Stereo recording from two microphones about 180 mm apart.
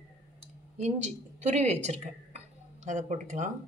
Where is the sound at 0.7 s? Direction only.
40° right (ahead or behind).